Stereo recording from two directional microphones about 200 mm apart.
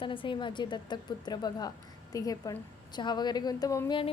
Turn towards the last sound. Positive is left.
turn(degrees=25)  # may be behind; listen again after turning